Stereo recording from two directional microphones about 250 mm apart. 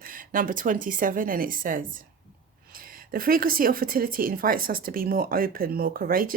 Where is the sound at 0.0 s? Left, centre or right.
Right.